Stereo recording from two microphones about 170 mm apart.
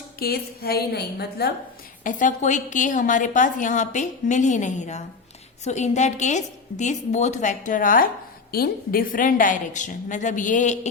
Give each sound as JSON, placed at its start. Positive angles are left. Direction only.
{"t": 0.2, "sound": "a woman's voice", "side_deg": 65}
{"t": 2.0, "sound": "a woman's voice", "side_deg": 50}